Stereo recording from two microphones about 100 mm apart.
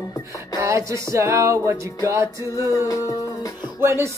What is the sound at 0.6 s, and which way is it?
Music, 30° right (ahead or behind).